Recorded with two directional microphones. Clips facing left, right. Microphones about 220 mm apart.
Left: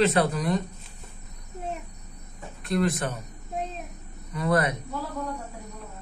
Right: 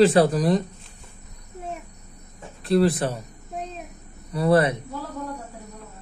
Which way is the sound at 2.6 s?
35° right (ahead or behind).